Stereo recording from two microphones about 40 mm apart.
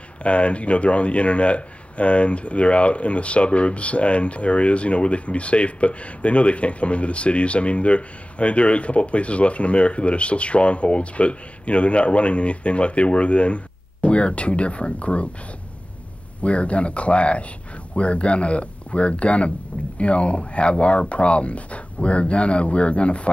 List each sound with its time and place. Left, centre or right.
0.2 s speech: left
16.4 s speech: left